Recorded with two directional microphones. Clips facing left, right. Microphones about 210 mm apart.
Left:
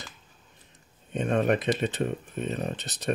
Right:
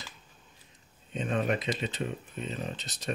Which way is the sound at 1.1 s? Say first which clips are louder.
Left 5 dB; 55° left (ahead or behind).